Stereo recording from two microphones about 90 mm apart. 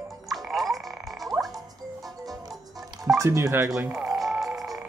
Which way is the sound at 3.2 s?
30° right (ahead or behind).